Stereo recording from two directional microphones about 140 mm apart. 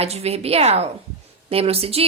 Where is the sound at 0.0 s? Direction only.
45° right (ahead or behind).